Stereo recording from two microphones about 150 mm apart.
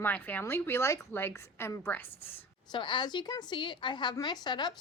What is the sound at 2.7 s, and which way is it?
A woman's voice, 30° left (ahead or behind).